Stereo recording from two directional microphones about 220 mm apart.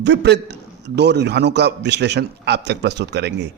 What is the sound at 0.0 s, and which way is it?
Speech, 50° right (ahead or behind).